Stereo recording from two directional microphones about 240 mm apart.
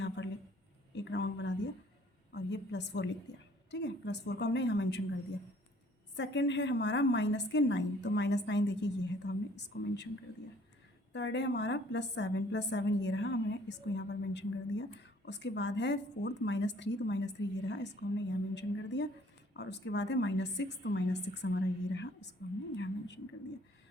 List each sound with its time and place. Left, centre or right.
0.9 s a sound: left
3.7 s a woman's voice: left
6.1 s a woman's voice: left
11.1 s a woman's voice: left